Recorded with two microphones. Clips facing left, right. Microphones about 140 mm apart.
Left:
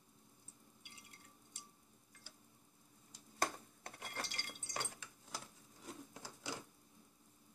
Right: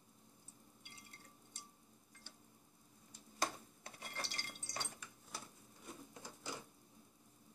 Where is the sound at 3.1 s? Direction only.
60° left (ahead or behind).